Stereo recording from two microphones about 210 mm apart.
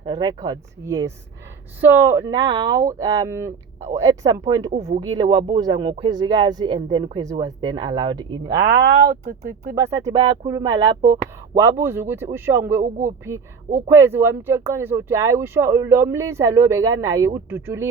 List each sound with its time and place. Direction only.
0.0 s speech: 20° right (ahead or behind)
4.7 s speech: 30° right (ahead or behind)
4.9 s speech: 20° right (ahead or behind)
8.4 s speech: 50° right (ahead or behind)
9.3 s speech: 40° right (ahead or behind)
9.7 s speech: 15° right (ahead or behind)
12.8 s speech: 35° right (ahead or behind)
13.8 s speech: 10° right (ahead or behind)